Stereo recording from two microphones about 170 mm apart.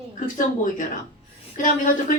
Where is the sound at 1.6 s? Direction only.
50° left (ahead or behind).